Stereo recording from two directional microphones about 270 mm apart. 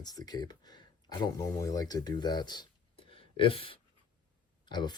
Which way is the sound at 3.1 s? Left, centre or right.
Centre.